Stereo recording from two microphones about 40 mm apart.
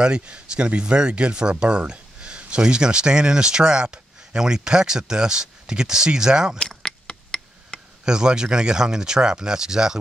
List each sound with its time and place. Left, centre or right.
0.0 s speech: right
6.7 s a sound: centre
8.0 s speech: centre